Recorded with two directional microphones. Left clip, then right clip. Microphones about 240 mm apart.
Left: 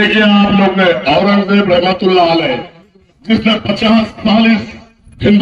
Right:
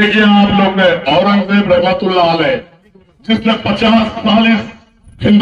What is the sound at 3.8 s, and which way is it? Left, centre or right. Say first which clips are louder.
Speech: right 1 dB; left.